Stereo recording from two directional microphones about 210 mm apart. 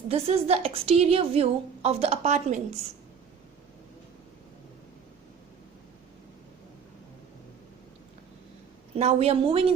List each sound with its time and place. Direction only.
0.1 s a woman's voice: 30° right (ahead or behind)
9.0 s a woman's voice: 30° right (ahead or behind)